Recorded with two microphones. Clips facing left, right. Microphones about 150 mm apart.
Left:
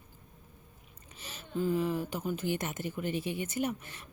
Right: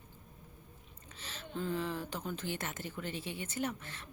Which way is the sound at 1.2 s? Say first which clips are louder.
Left 6 dB; 10° left (ahead or behind).